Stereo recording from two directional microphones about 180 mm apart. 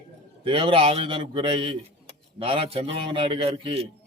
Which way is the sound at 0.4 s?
30° right (ahead or behind).